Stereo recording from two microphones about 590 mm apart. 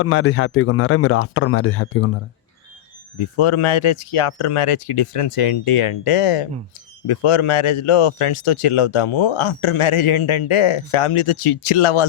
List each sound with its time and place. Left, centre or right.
0.0 s a man's voice: left
3.2 s speech: left